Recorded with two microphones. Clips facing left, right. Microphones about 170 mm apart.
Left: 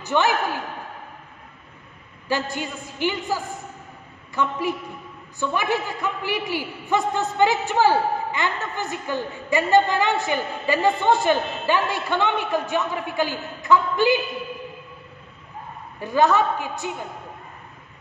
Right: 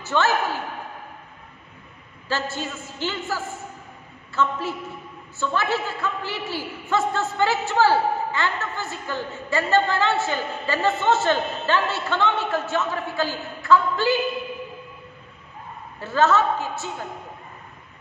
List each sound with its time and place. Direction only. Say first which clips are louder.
0.0 s a man's voice: left 1 dB; 15° left (ahead or behind)
2.2 s a man's voice: left 2 dB; 15° left (ahead or behind)
16.0 s a man's voice: left 1 dB; 15° left (ahead or behind)